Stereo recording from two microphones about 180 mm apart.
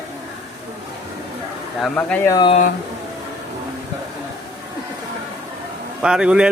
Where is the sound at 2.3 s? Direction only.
25° left (ahead or behind).